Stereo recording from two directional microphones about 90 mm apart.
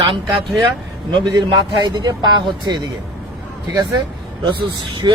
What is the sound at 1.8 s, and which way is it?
Speech, 50° right (ahead or behind).